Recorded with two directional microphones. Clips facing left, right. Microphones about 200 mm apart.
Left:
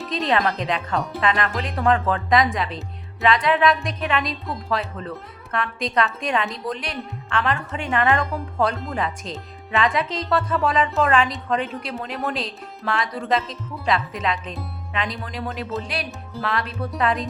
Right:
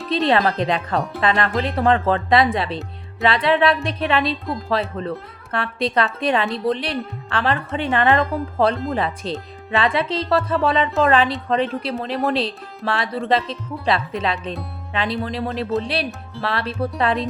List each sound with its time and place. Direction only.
0.1 s speech: 30° right (ahead or behind)